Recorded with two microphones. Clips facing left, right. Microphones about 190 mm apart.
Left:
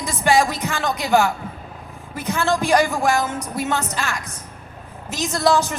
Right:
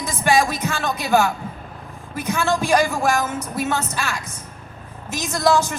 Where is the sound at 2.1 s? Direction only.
15° right (ahead or behind).